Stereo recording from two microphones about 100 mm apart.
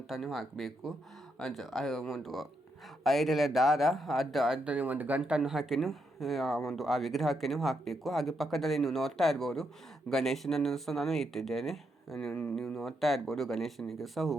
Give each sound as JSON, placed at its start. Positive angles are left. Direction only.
{"t": 0.1, "sound": "speech", "side_deg": 0}
{"t": 5.4, "sound": "speech", "side_deg": -5}